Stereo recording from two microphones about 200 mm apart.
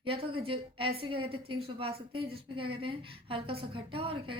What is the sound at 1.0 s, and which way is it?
A woman's voice, 25° right (ahead or behind).